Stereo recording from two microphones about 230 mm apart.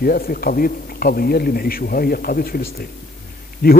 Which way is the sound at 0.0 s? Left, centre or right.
Left.